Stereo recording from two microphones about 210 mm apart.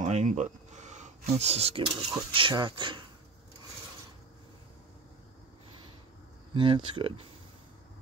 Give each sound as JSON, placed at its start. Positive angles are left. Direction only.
{"t": 0.0, "sound": "a sound", "side_deg": -35}
{"t": 2.1, "sound": "speech", "side_deg": -20}
{"t": 6.5, "sound": "speech", "side_deg": -25}